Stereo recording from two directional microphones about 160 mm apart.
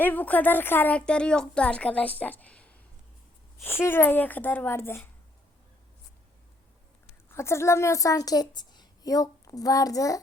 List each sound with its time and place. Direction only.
0.0 s a woman's voice: 10° left (ahead or behind)
7.3 s a woman's voice: 15° left (ahead or behind)